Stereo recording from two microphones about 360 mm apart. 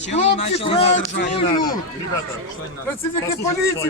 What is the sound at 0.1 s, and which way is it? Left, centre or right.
Speech, centre.